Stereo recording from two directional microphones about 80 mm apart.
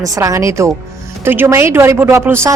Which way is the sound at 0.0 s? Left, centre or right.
Right.